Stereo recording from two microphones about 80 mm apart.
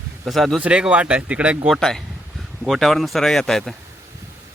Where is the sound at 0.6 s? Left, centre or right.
Centre.